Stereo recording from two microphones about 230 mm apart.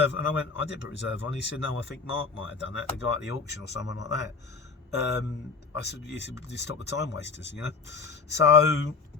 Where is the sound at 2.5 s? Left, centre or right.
Left.